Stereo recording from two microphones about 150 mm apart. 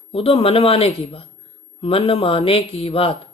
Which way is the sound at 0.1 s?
40° left (ahead or behind).